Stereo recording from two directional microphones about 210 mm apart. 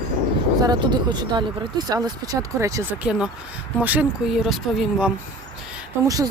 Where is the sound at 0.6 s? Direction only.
20° right (ahead or behind); by 5.1 s 5° right (ahead or behind).